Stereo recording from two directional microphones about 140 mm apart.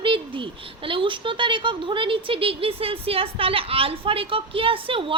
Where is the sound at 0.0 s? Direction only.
40° right (ahead or behind).